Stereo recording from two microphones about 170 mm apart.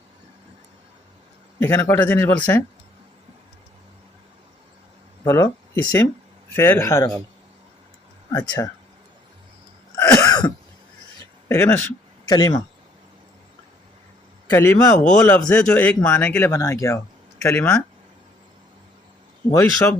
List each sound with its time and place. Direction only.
1.5 s a man's voice: 15° left (ahead or behind)
5.2 s speech: 15° left (ahead or behind)
8.3 s speech: 20° left (ahead or behind)
10.0 s throat clearing: 20° left (ahead or behind)
11.4 s speech: 15° left (ahead or behind)
14.5 s speech: 15° left (ahead or behind)
15.0 s speech: 5° left (ahead or behind)
19.5 s speech: 15° left (ahead or behind)